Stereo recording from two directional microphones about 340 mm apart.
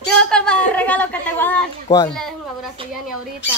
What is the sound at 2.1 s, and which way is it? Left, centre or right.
Speech, centre.